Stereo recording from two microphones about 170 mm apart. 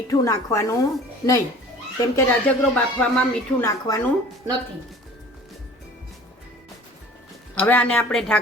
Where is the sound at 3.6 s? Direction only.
20° left (ahead or behind).